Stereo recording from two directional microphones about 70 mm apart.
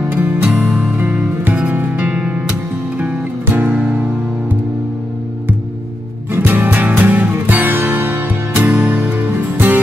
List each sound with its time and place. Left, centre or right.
0.1 s music: right
0.5 s music: centre
0.7 s music: centre
6.3 s music: right